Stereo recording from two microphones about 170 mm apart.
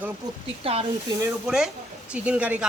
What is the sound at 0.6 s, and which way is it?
Speech, 35° right (ahead or behind).